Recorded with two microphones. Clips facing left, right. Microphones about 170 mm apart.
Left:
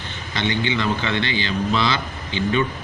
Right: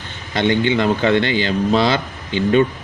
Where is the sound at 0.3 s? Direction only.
50° right (ahead or behind).